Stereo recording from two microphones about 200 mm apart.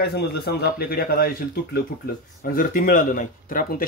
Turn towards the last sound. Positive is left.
turn(degrees=45)  # may be behind; listen again after turning